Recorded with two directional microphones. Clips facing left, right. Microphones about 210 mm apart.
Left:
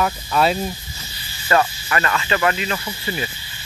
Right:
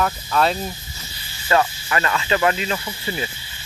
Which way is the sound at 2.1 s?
20° right (ahead or behind).